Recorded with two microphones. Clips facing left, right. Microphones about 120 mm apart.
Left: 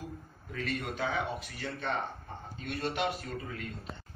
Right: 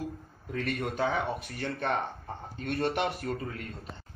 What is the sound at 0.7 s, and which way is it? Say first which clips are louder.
Speech: right 4 dB; 50° right (ahead or behind).